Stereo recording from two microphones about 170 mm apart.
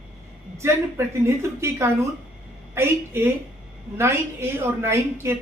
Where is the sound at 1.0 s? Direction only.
15° right (ahead or behind).